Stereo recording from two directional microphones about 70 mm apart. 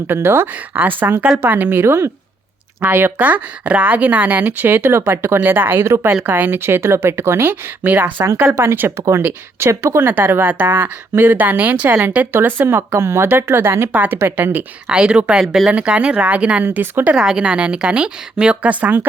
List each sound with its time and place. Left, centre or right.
0.1 s speech: right
7.4 s speech: right
13.9 s speech: right
14.8 s a woman's voice: centre
17.2 s a woman's voice: centre